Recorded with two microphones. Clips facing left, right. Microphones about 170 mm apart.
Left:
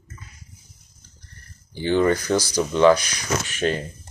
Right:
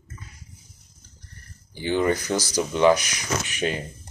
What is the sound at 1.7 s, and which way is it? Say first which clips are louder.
Speech: left 3 dB; 15° right (ahead or behind).